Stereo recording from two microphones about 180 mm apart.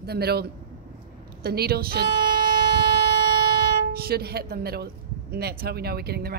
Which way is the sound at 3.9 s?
55° right (ahead or behind).